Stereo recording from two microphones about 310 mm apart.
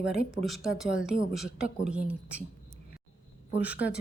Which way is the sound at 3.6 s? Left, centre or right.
Centre.